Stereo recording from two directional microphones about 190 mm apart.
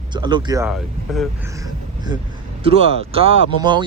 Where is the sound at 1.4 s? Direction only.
15° right (ahead or behind).